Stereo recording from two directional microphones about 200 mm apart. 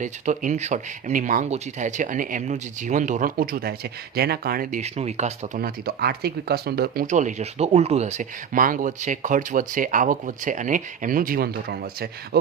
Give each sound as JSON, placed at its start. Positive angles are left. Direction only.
{"t": 0.0, "sound": "speech", "side_deg": -35}